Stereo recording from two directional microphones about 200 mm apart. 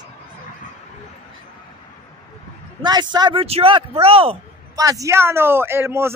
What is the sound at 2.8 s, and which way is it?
Speech, 20° right (ahead or behind).